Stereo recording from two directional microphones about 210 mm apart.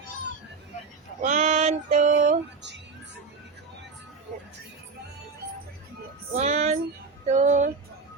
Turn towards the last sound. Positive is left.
turn(degrees=-35)  # may be behind; listen again after turning